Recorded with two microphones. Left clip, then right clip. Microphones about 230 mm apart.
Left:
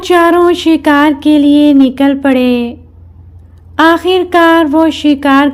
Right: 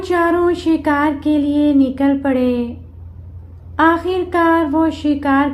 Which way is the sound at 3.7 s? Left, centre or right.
Left.